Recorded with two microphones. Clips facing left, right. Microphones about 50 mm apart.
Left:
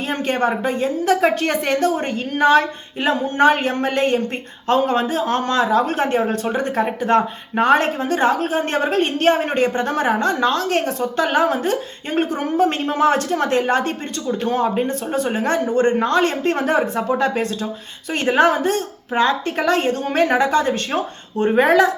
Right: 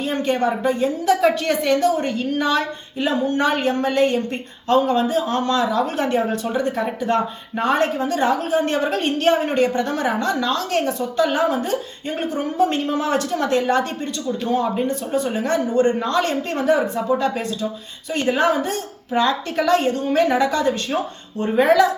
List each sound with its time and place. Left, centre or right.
0.0 s speech: left